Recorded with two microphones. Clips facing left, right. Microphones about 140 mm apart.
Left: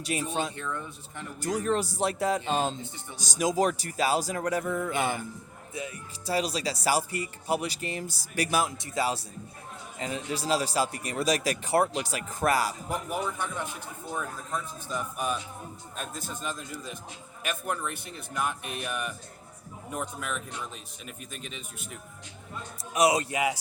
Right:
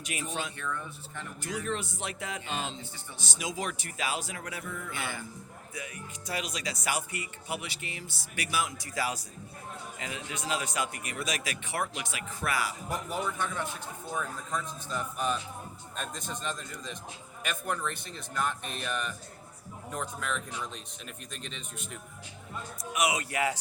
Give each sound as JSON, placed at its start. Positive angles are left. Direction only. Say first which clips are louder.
{"t": 0.0, "sound": "speech", "louder": "left 6 dB", "side_deg": 35}
{"t": 0.5, "sound": "speech", "louder": "left 2 dB", "side_deg": 20}
{"t": 1.4, "sound": "speech", "louder": "left 7 dB", "side_deg": 40}
{"t": 5.7, "sound": "speech", "louder": "left 5 dB", "side_deg": 30}
{"t": 8.8, "sound": "speech", "louder": "left 4 dB", "side_deg": 25}
{"t": 12.9, "sound": "speech", "louder": "left 2 dB", "side_deg": 10}
{"t": 22.9, "sound": "speech", "louder": "left 6 dB", "side_deg": 35}
{"t": 23.3, "sound": "speech", "louder": "left 2 dB", "side_deg": 15}